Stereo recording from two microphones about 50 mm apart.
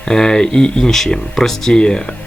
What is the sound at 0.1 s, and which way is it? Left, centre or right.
Speech, centre.